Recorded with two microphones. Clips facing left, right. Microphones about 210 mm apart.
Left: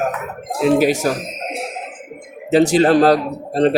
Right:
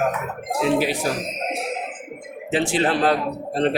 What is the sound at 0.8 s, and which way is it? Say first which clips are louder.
Speech: left 7 dB; 45° left (ahead or behind).